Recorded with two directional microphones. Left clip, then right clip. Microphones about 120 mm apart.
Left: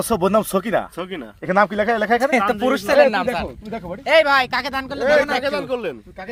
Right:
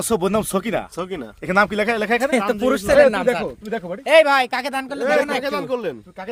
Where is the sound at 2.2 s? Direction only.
20° right (ahead or behind).